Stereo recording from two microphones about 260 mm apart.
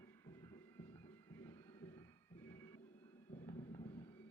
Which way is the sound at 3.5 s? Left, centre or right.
Left.